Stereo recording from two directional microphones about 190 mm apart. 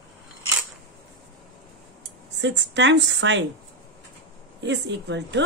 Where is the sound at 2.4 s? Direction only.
65° right (ahead or behind).